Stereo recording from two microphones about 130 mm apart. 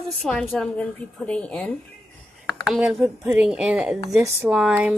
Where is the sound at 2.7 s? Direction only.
5° right (ahead or behind).